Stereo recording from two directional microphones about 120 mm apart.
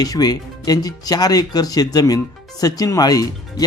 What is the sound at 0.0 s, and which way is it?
Speech, 35° left (ahead or behind).